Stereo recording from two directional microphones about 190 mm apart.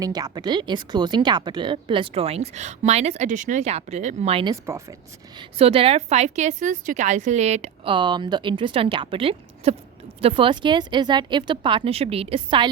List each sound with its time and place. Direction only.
0.0 s speech: 20° right (ahead or behind)
4.6 s speech: 15° right (ahead or behind)
5.4 s a woman's voice: 30° right (ahead or behind)